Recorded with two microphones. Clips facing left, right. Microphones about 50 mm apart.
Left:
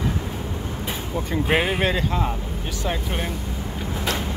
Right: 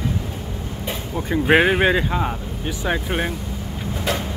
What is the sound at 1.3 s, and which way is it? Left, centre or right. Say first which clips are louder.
Speech: right 6 dB; centre.